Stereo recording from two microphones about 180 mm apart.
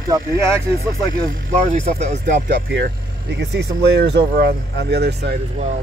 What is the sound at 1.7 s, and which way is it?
Speech, 40° right (ahead or behind).